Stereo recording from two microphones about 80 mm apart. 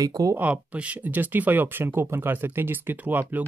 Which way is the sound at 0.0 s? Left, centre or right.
Right.